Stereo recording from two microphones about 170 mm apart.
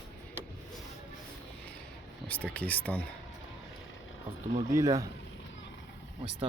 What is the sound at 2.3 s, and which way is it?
Speech, 10° left (ahead or behind).